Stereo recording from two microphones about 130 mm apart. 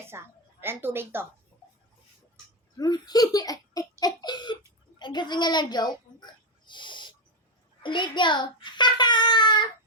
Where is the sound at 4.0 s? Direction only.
30° left (ahead or behind).